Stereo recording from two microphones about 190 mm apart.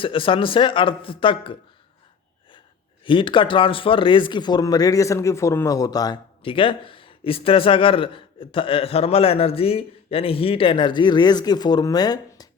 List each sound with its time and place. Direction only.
0.0 s speech: 30° left (ahead or behind)
3.0 s speech: 25° left (ahead or behind)